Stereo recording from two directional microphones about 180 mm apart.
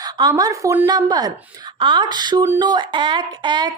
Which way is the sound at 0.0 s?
20° right (ahead or behind).